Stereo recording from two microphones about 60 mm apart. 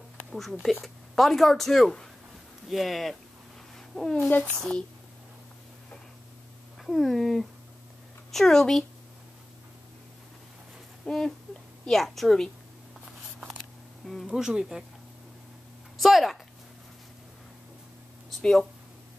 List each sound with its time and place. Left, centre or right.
0.3 s speech: centre
6.8 s speech: centre
11.1 s speech: centre
14.2 s speech: centre
16.0 s speech: centre
18.4 s speech: centre